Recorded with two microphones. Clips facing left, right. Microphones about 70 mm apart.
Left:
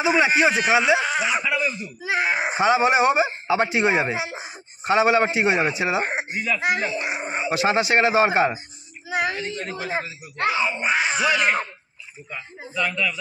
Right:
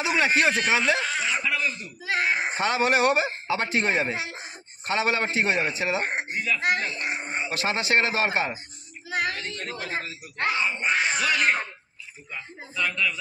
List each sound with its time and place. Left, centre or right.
0.0 s a man's voice: centre
3.3 s a man's voice: centre